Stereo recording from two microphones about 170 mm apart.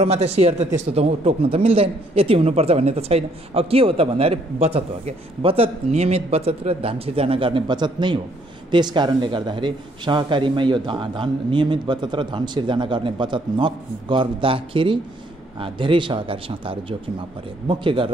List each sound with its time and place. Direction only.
0.0 s a man's voice: 40° right (ahead or behind)